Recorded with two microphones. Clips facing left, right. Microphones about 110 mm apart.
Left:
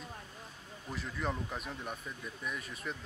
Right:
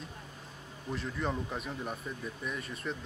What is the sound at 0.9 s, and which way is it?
Speech, centre (ahead or behind).